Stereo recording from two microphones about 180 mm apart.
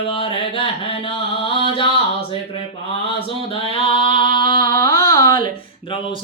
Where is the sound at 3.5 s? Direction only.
30° left (ahead or behind).